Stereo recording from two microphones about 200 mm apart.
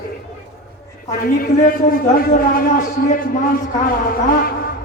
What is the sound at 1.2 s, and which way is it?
A man's voice, 45° left (ahead or behind).